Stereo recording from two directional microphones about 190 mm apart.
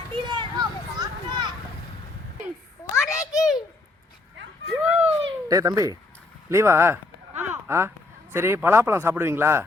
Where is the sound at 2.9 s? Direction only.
15° left (ahead or behind).